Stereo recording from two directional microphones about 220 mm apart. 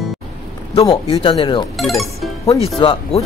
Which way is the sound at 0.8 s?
20° left (ahead or behind).